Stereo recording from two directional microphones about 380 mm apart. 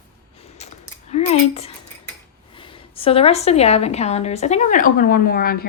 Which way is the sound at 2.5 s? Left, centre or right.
Centre.